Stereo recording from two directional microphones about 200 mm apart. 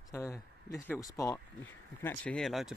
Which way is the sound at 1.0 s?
15° left (ahead or behind).